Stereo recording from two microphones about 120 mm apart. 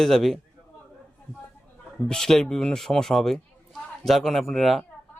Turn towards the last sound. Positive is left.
turn(degrees=0)  # may be behind; listen again after turning